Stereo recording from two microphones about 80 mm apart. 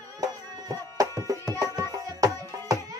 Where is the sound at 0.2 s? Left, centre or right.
Right.